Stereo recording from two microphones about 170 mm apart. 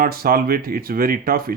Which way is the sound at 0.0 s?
60° right (ahead or behind).